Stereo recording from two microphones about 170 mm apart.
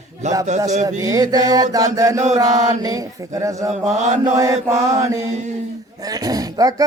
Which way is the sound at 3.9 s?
45° right (ahead or behind).